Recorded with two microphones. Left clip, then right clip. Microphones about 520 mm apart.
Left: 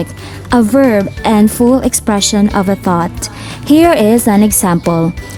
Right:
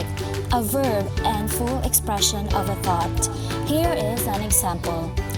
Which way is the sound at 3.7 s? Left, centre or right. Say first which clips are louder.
Left 15 dB; centre.